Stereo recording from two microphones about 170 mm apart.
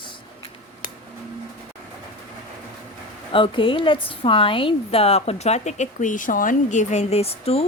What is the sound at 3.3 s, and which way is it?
A woman's voice, 30° left (ahead or behind).